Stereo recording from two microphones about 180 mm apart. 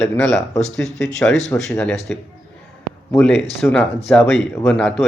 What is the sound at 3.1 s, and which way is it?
Speech, 5° left (ahead or behind).